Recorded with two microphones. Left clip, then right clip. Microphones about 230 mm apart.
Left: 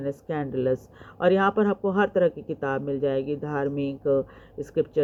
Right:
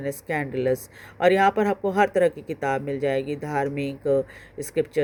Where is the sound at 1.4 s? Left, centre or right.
Right.